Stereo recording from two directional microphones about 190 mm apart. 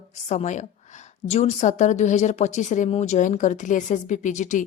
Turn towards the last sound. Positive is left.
turn(degrees=40)  # may be behind; listen again after turning